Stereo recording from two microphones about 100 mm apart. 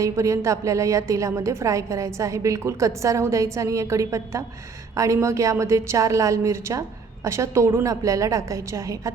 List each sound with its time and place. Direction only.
0.0 s a woman's voice: 30° right (ahead or behind)